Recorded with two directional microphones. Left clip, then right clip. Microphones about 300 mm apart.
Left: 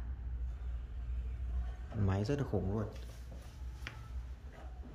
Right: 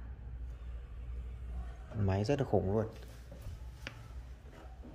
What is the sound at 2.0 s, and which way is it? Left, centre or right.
Speech, centre.